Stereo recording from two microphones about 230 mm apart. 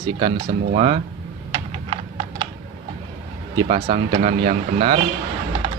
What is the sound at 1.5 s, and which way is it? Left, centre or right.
Computer keyboard, right.